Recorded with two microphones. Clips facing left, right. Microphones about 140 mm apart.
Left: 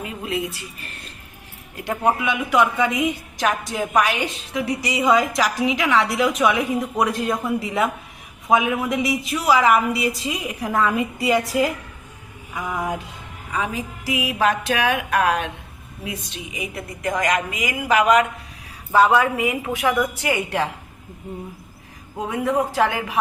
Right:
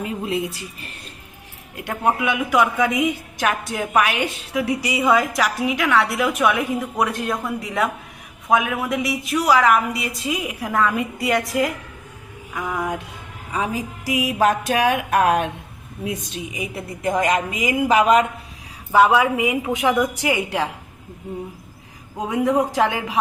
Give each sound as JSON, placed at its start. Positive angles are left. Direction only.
{"t": 0.0, "sound": "speech", "side_deg": -35}
{"t": 1.7, "sound": "speech", "side_deg": -5}
{"t": 12.5, "sound": "a sound", "side_deg": 5}
{"t": 13.5, "sound": "a woman's voice", "side_deg": -35}
{"t": 18.9, "sound": "a woman's voice", "side_deg": -10}
{"t": 22.3, "sound": "a woman's voice", "side_deg": -10}